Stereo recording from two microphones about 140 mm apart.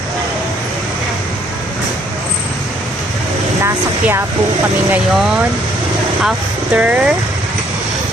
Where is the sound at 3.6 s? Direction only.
20° right (ahead or behind).